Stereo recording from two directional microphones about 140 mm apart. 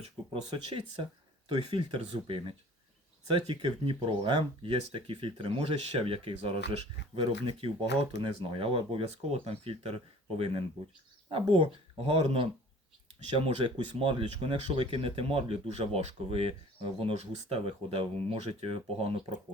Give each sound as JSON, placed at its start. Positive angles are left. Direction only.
{"t": 1.5, "sound": "speech", "side_deg": -35}